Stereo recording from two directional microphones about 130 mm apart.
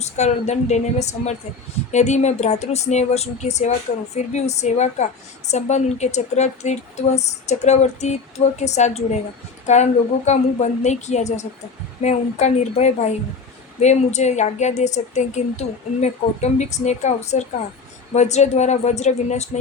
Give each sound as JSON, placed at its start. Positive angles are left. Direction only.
{"t": 0.0, "sound": "a woman's voice", "side_deg": 60}